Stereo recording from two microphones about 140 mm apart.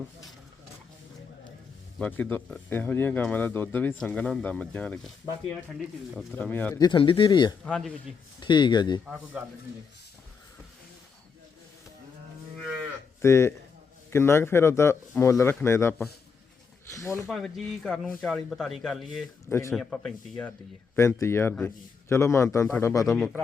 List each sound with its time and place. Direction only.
2.0 s speech: 10° left (ahead or behind)
6.7 s speech: 30° left (ahead or behind)
7.6 s speech: 5° left (ahead or behind)
8.4 s speech: 35° left (ahead or behind)
13.2 s a man's voice: 20° left (ahead or behind)
17.2 s speech: 5° left (ahead or behind)
19.5 s speech: 15° left (ahead or behind)
19.7 s speech: 5° left (ahead or behind)
20.9 s a man's voice: 20° left (ahead or behind)
23.0 s speech: centre (ahead or behind)